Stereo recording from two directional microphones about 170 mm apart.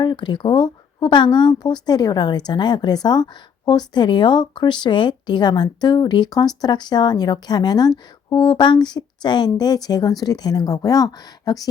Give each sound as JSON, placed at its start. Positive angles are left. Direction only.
{"t": 0.0, "sound": "speech", "side_deg": 25}